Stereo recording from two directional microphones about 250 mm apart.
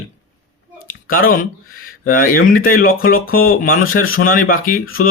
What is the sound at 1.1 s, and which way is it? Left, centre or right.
Speech, left.